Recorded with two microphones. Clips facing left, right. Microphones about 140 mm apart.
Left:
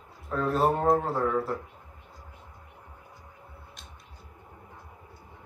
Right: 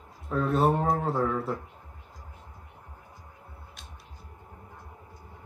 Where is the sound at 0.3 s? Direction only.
Centre (ahead or behind).